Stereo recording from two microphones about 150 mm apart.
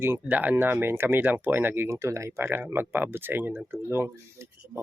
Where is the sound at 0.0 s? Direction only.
10° right (ahead or behind).